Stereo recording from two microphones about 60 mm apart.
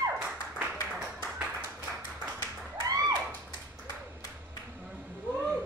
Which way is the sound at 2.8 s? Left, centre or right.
Right.